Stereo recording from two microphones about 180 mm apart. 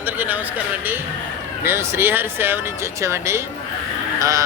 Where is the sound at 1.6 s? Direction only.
15° right (ahead or behind).